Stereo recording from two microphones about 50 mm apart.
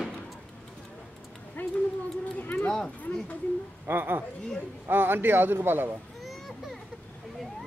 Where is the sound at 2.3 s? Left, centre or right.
Left.